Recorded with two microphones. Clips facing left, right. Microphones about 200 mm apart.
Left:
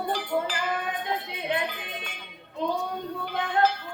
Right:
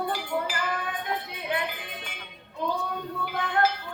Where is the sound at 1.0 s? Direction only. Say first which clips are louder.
Left 2 dB; 25° left (ahead or behind).